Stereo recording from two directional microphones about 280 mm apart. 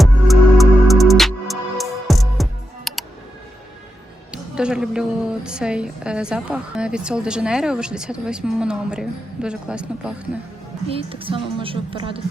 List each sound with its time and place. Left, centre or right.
0.0 s music: centre
4.3 s a woman's voice: centre
10.8 s a woman's voice: centre